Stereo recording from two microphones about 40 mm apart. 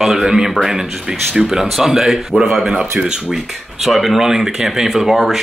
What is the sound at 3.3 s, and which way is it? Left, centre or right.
Speech, centre.